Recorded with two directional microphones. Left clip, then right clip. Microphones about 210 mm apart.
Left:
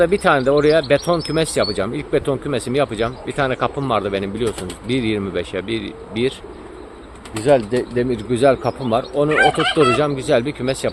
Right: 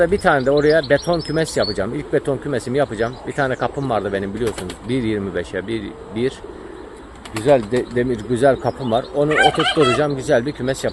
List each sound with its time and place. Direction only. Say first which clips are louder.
0.0 s speech: left 1 dB; centre (ahead or behind)
7.4 s speech: even; centre (ahead or behind)
9.3 s speech: even; 50° right (ahead or behind)
10.0 s speech: even; centre (ahead or behind)